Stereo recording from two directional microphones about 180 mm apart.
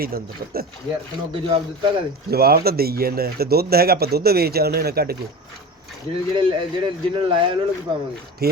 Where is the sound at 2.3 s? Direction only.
60° right (ahead or behind).